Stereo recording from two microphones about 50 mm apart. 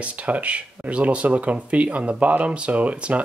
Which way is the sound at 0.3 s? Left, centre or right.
Right.